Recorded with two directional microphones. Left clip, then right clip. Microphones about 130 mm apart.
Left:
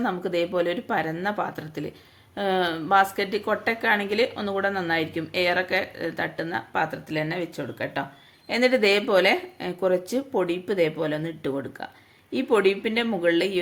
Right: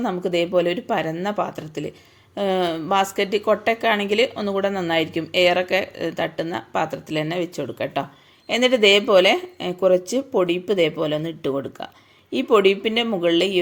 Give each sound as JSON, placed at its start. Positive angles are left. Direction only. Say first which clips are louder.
{"t": 0.0, "sound": "speech", "louder": "right 3 dB", "side_deg": -20}